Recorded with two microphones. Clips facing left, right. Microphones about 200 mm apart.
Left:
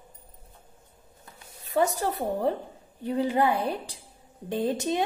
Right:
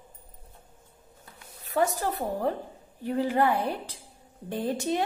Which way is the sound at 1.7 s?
25° left (ahead or behind).